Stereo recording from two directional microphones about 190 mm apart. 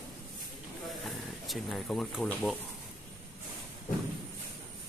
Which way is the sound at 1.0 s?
Centre (ahead or behind).